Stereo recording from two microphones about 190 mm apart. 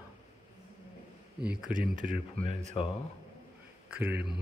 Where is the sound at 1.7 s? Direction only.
45° right (ahead or behind).